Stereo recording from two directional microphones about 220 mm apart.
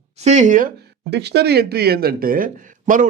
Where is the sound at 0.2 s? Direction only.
30° right (ahead or behind).